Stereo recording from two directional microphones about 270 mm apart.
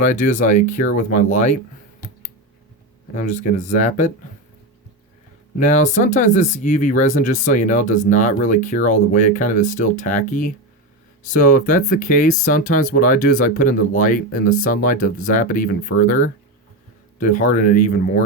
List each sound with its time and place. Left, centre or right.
0.0 s speech: left
3.2 s speech: left
5.5 s speech: left